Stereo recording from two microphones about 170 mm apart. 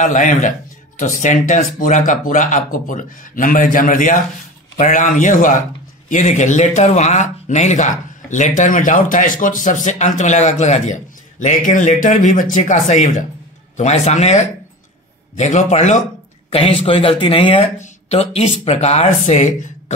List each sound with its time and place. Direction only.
0.0 s speech: 50° left (ahead or behind)